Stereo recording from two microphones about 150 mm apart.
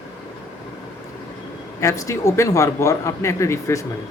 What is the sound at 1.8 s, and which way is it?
Speech, 20° left (ahead or behind).